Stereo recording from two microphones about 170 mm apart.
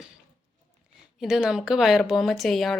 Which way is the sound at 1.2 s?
5° right (ahead or behind).